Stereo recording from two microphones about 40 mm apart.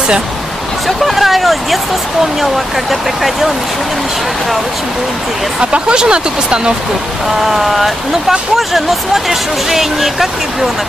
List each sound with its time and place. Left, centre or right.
0.8 s speech: centre
2.9 s speech: centre
5.6 s speech: right
7.4 s speech: centre